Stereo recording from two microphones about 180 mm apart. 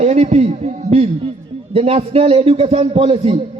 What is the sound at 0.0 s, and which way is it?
A man's voice, 40° right (ahead or behind).